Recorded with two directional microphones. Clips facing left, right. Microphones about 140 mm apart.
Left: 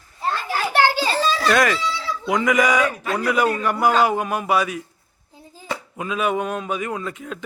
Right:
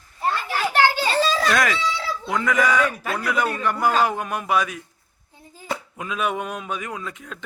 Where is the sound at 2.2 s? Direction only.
15° left (ahead or behind).